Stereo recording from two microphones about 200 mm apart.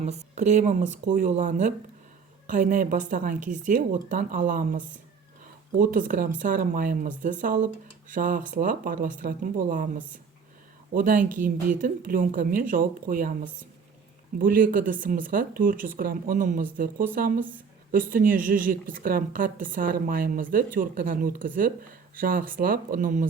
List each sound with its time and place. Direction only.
0.3 s speech: 35° right (ahead or behind)